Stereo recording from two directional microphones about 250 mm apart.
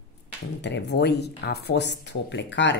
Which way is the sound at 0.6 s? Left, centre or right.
Left.